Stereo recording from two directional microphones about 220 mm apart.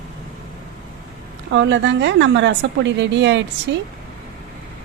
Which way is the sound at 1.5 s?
55° right (ahead or behind).